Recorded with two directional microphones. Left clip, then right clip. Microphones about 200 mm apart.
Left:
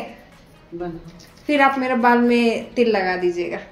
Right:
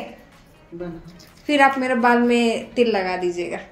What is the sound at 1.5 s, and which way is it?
A woman's voice, 10° right (ahead or behind).